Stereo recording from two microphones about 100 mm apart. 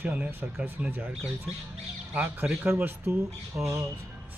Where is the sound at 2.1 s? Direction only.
20° right (ahead or behind).